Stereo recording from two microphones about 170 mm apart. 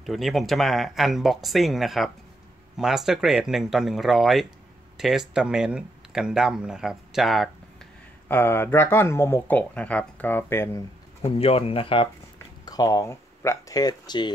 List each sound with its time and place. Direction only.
0.0 s speech: centre (ahead or behind)
8.3 s speech: 10° left (ahead or behind)
11.2 s speech: 35° left (ahead or behind)
12.6 s speech: 20° left (ahead or behind)